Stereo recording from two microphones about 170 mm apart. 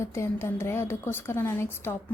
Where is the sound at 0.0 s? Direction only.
15° left (ahead or behind).